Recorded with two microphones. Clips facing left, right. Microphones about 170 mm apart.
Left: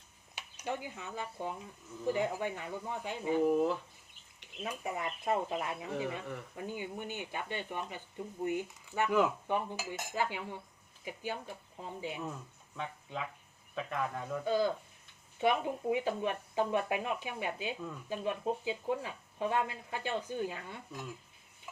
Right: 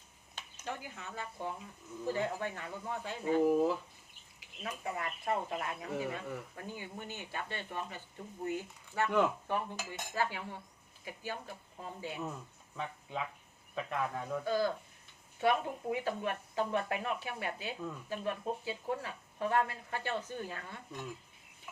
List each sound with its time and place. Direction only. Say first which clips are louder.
0.3 s speech: left 4 dB; 15° left (ahead or behind)
3.4 s speech: even; centre (ahead or behind)
4.6 s speech: left 2 dB; 20° left (ahead or behind)
9.0 s speech: left 1 dB; 5° left (ahead or behind)
12.2 s speech: even; centre (ahead or behind)
14.4 s speech: left 3 dB; 15° left (ahead or behind)
20.9 s speech: right 2 dB; 5° left (ahead or behind)